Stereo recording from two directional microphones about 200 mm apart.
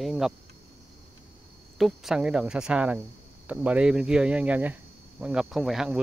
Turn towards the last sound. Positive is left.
turn(degrees=0)  # may be behind; listen again after turning